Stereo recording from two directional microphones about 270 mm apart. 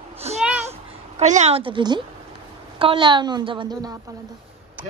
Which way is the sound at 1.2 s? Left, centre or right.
Right.